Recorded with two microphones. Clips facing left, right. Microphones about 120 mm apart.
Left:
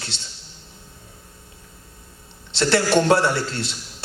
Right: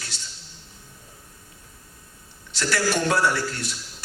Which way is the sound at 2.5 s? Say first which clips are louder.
Left 6 dB; 25° left (ahead or behind).